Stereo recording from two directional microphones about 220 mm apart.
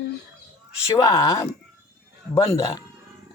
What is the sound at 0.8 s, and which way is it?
A man's voice, 15° left (ahead or behind).